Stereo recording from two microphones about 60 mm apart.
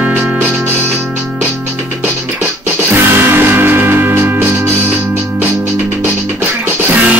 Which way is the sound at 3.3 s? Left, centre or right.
Right.